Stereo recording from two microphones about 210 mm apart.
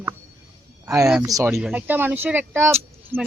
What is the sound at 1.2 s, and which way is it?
A man's voice, 15° right (ahead or behind).